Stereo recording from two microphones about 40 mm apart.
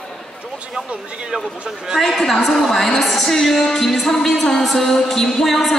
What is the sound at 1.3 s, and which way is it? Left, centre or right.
Speech, right.